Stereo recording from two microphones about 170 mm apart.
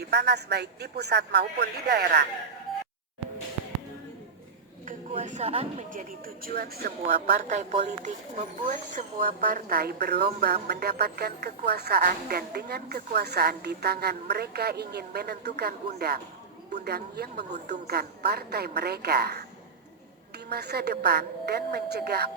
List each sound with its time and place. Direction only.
0.1 s a woman's voice: 80° right
4.9 s speech: 50° right (ahead or behind)
5.9 s a woman's voice: 55° right (ahead or behind)
20.5 s a woman's voice: 70° right (ahead or behind)